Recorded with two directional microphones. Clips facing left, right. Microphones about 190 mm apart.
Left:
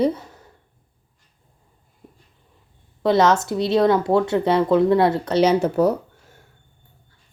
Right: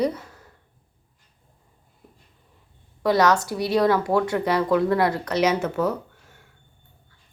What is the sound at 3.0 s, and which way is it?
Speech, 25° left (ahead or behind).